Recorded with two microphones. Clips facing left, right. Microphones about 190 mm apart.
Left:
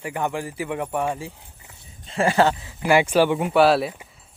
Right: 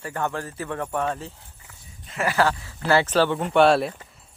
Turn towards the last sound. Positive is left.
turn(degrees=0)  # may be behind; listen again after turning